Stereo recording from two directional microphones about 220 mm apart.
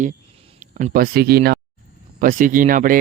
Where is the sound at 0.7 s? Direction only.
35° right (ahead or behind).